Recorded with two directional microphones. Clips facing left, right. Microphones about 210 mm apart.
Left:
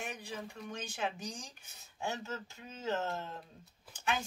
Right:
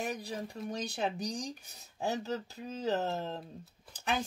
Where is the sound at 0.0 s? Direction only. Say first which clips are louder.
Right 5 dB; 35° right (ahead or behind).